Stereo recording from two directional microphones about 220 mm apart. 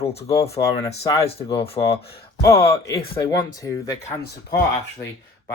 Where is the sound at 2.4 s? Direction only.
15° left (ahead or behind).